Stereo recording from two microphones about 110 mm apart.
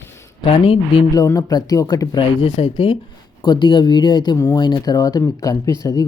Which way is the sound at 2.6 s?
55° left (ahead or behind).